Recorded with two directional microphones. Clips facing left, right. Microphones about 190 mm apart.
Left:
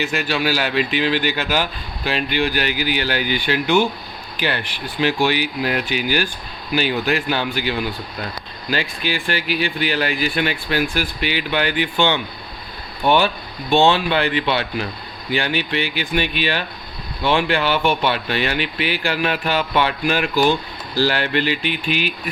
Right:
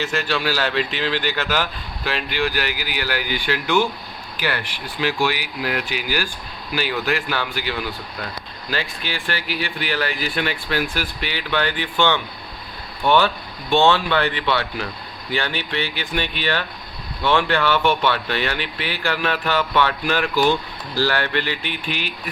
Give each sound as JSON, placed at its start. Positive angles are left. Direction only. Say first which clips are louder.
{"t": 0.0, "sound": "speech", "louder": "left 2 dB", "side_deg": 10}